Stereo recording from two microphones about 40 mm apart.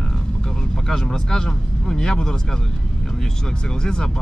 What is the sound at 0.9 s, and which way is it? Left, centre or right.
Speech, centre.